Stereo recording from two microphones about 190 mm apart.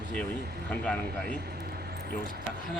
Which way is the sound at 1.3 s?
55° right (ahead or behind).